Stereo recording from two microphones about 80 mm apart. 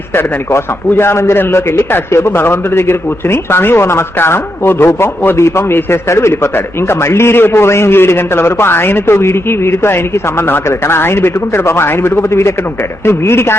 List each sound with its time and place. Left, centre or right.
0.1 s a man's voice: left